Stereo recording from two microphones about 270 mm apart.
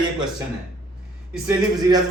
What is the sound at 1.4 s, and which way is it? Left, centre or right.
Speech, centre.